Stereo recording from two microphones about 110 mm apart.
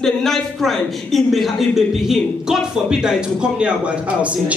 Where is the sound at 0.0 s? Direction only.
5° left (ahead or behind).